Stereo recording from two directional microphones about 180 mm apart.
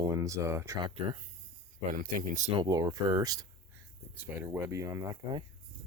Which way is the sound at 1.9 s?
50° right (ahead or behind).